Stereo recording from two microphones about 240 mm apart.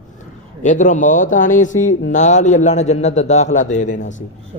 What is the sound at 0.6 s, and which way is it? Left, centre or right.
Speech, left.